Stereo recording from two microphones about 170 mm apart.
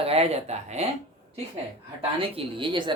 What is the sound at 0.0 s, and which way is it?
Speech, 35° right (ahead or behind).